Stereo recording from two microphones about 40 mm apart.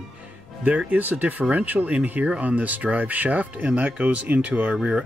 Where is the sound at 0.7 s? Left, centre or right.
Right.